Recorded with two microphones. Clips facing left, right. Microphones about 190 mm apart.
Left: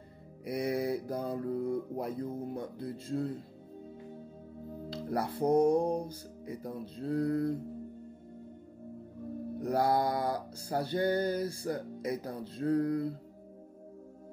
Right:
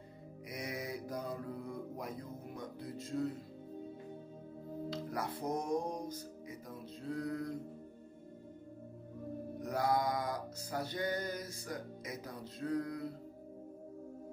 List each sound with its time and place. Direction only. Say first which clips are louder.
0.5 s male singing: left 11 dB; 30° left (ahead or behind)
4.8 s music: left 6 dB; 30° left (ahead or behind)
5.4 s male singing: left 12 dB; 30° left (ahead or behind)
9.6 s male singing: left 5 dB; 30° left (ahead or behind)